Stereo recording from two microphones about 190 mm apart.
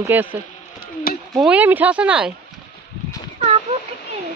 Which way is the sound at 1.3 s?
5° right (ahead or behind).